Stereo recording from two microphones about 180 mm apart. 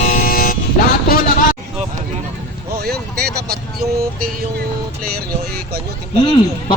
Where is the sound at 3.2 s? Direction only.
60° right (ahead or behind).